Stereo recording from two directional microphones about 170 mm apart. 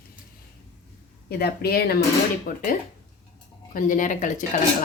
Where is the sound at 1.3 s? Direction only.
65° left (ahead or behind).